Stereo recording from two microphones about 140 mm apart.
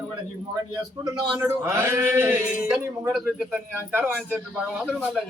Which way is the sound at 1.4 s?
20° right (ahead or behind).